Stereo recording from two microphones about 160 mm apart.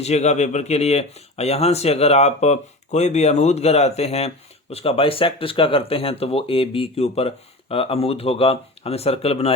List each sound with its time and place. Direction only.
0.0 s speech: 45° left (ahead or behind)